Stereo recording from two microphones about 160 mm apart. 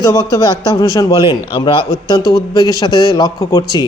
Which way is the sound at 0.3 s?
20° left (ahead or behind).